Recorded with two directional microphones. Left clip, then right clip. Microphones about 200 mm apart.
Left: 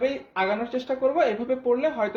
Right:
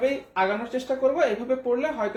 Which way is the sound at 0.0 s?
40° left (ahead or behind).